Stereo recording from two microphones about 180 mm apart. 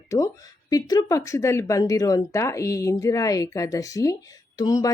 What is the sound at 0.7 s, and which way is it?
Speech, 20° left (ahead or behind).